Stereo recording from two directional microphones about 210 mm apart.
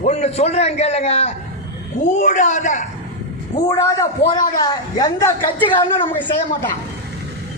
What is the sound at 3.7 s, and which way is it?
A man's voice, 15° left (ahead or behind).